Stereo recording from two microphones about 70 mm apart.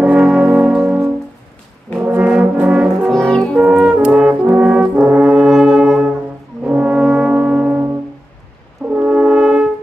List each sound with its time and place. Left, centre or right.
0.0 s brass instrument: centre
0.7 s music: centre
2.0 s brass instrument: centre
3.1 s brass instrument: centre
3.6 s music: centre
4.3 s brass instrument: right
8.9 s french horn: centre